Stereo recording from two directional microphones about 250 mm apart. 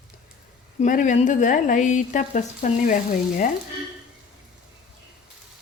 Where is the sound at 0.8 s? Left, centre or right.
Left.